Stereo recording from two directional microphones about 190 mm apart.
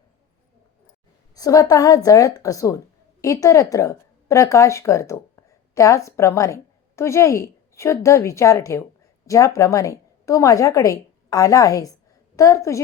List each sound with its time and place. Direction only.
1.4 s a woman's voice: 20° left (ahead or behind)